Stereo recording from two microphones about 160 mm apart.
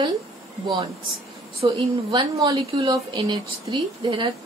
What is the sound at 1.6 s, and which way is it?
A woman's voice, 30° right (ahead or behind).